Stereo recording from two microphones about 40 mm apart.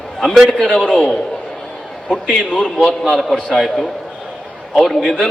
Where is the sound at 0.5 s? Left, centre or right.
Centre.